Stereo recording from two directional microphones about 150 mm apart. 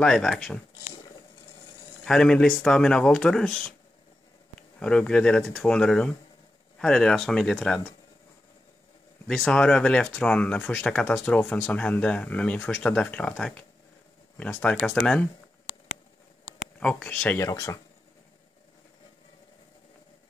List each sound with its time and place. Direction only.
0.0 s speech: centre (ahead or behind)
2.0 s speech: 5° left (ahead or behind)
4.7 s speech: 5° left (ahead or behind)
9.3 s speech: 5° left (ahead or behind)
14.3 s a sound: 15° left (ahead or behind)
16.8 s speech: 5° left (ahead or behind)
17.4 s speech: 25° left (ahead or behind)